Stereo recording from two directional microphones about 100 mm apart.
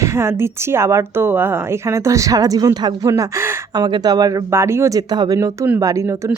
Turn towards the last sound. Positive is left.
turn(degrees=-30)  # may be behind; listen again after turning